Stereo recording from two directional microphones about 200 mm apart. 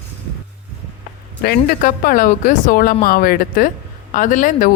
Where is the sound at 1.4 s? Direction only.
50° left (ahead or behind).